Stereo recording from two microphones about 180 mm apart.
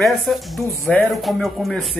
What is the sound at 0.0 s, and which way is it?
Speech, centre (ahead or behind).